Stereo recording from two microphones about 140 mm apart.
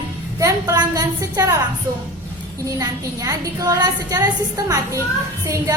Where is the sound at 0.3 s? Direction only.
25° right (ahead or behind).